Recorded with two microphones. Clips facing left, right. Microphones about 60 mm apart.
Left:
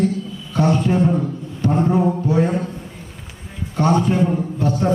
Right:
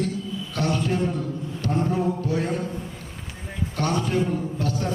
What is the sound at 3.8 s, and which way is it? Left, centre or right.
A man's voice, left.